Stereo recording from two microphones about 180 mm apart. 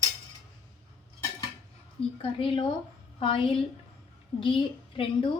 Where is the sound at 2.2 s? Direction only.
30° left (ahead or behind).